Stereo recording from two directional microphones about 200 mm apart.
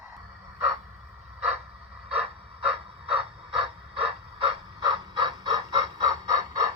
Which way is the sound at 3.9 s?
25° right (ahead or behind).